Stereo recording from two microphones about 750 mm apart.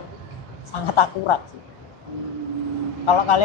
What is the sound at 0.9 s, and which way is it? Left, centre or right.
Speech, left.